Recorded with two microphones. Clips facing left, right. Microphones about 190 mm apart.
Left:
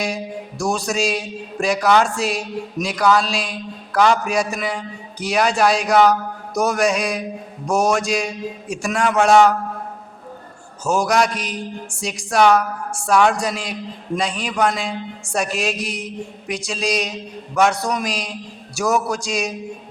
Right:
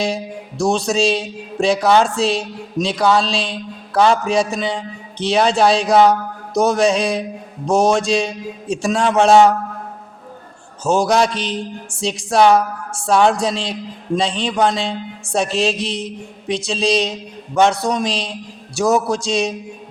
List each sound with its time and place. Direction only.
0.9 s a man's voice: 25° right (ahead or behind)
10.8 s a man's voice: 25° right (ahead or behind)